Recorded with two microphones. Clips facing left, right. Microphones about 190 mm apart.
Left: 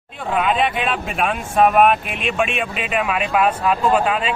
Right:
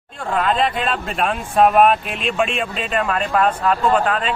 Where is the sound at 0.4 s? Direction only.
5° left (ahead or behind).